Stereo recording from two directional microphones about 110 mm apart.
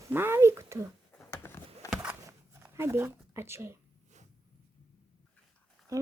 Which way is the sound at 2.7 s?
20° right (ahead or behind).